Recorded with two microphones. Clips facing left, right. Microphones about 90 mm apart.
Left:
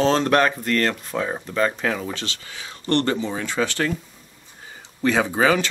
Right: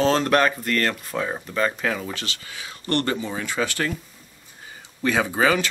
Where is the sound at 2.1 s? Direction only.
10° right (ahead or behind).